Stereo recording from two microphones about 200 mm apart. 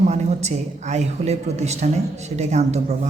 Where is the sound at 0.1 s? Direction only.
35° right (ahead or behind).